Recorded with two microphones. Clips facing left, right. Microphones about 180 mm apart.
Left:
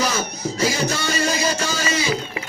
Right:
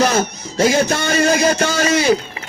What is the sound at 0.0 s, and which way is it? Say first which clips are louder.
A man's voice: right 6 dB; 65° right (ahead or behind).